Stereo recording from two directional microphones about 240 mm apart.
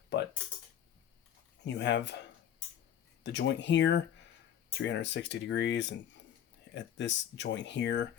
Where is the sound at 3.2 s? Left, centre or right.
Left.